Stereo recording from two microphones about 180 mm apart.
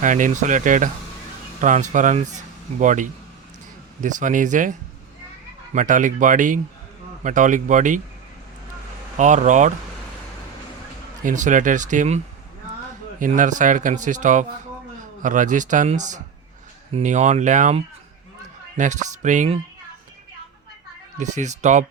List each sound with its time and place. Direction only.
0.0 s speech: 45° right (ahead or behind)
5.7 s speech: 45° right (ahead or behind)
9.1 s speech: 45° right (ahead or behind)
11.2 s speech: 45° right (ahead or behind)
21.2 s speech: 40° right (ahead or behind)